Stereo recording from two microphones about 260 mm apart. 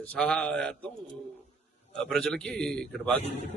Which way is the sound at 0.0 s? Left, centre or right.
Centre.